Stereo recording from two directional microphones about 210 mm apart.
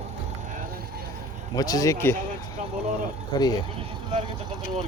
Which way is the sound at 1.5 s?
15° left (ahead or behind).